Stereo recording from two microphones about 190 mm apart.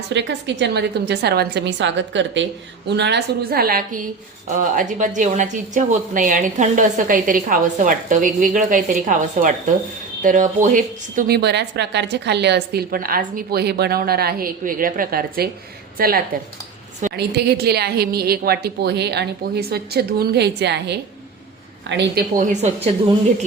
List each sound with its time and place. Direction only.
0.1 s a woman's voice: 65° right (ahead or behind)
22.4 s a woman's voice: 40° right (ahead or behind)